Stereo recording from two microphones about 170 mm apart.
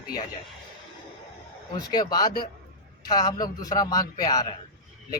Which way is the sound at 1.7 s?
25° left (ahead or behind).